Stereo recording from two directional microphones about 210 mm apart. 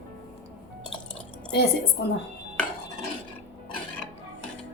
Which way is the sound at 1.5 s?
50° left (ahead or behind).